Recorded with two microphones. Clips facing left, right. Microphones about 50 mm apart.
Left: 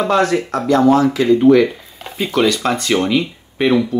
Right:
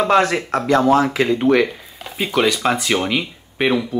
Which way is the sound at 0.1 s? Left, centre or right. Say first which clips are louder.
Even; right.